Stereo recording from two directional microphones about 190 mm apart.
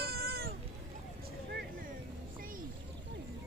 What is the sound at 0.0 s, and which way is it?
Cat, 55° right (ahead or behind).